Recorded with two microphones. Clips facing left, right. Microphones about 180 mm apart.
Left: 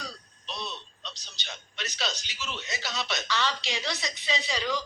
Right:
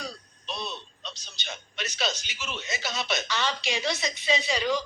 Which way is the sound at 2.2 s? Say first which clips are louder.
Right 2 dB; 20° right (ahead or behind).